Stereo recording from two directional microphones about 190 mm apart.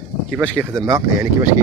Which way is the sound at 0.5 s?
15° right (ahead or behind).